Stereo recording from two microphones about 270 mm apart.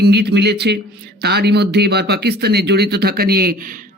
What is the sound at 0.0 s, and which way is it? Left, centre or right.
Speech, right.